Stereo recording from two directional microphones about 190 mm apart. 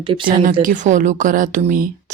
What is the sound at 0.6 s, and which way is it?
A woman's voice, 40° right (ahead or behind).